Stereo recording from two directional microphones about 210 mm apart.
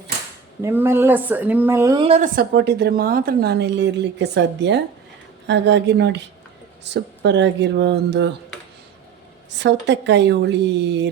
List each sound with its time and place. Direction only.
0.6 s a woman's voice: 10° right (ahead or behind)
2.0 s a woman's voice: 35° right (ahead or behind); by 8.3 s 55° right (ahead or behind)
9.6 s speech: 55° right (ahead or behind)